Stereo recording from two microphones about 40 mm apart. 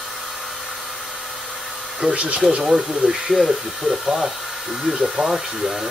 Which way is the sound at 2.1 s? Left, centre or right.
Right.